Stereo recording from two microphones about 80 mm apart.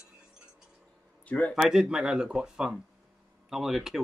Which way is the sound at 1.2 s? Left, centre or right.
Centre.